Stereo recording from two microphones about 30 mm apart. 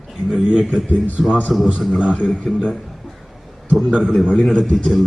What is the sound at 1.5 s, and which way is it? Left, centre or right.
Speech, centre.